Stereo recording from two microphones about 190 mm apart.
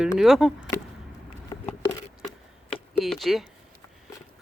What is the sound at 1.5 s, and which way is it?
Patter, 15° left (ahead or behind).